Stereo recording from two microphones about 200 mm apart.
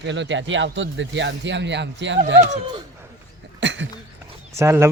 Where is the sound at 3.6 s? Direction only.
65° right (ahead or behind).